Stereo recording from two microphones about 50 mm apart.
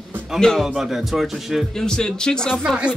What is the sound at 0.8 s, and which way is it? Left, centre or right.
Speech, centre.